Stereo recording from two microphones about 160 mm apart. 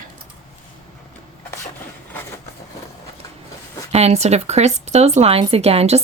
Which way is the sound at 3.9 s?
40° right (ahead or behind).